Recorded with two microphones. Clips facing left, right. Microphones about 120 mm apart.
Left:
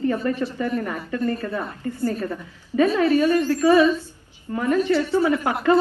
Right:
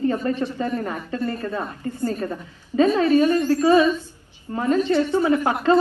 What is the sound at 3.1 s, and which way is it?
Speech, 45° right (ahead or behind).